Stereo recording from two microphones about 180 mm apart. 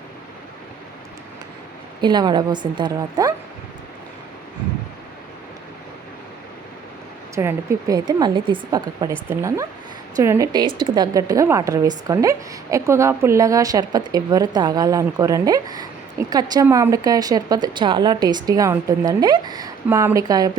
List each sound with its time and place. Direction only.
2.0 s a woman's voice: 25° right (ahead or behind)
7.3 s a woman's voice: 15° right (ahead or behind)